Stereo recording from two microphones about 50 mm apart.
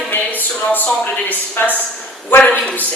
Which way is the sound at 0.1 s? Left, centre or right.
Left.